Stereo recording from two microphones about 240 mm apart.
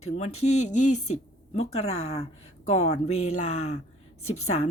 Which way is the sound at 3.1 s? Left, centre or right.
Left.